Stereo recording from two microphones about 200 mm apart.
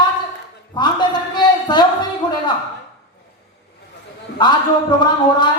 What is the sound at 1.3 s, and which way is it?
Speech, 20° left (ahead or behind).